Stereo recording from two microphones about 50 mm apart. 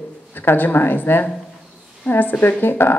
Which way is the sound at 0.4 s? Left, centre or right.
Left.